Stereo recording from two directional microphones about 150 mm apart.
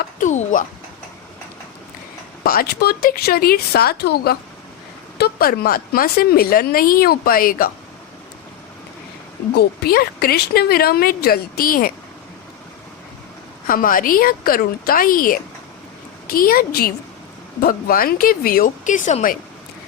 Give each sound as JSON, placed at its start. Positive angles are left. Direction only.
{"t": 0.0, "sound": "a sound", "side_deg": 55}
{"t": 2.4, "sound": "a woman's voice", "side_deg": 85}
{"t": 9.6, "sound": "a woman's voice", "side_deg": 90}
{"t": 13.7, "sound": "speech", "side_deg": 65}